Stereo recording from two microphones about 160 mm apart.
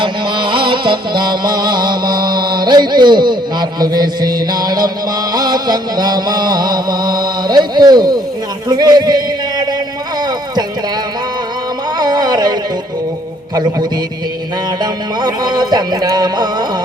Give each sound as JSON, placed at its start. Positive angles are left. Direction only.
{"t": 0.0, "sound": "music", "side_deg": -30}
{"t": 8.7, "sound": "speech", "side_deg": -25}
{"t": 11.9, "sound": "a sound", "side_deg": -25}
{"t": 15.2, "sound": "speech", "side_deg": -25}